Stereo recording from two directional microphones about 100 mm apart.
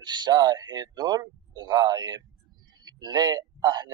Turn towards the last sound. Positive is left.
turn(degrees=-45)  # may be behind; listen again after turning